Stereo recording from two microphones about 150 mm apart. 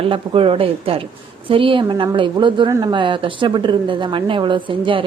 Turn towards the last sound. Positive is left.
turn(degrees=-35)  # may be behind; listen again after turning